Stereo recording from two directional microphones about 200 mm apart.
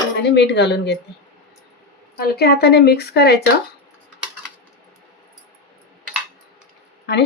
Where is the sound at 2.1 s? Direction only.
50° left (ahead or behind).